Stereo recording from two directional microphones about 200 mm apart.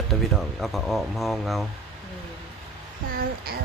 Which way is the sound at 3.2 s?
50° right (ahead or behind).